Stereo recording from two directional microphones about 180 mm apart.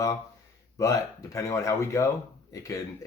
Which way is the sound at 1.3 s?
15° left (ahead or behind).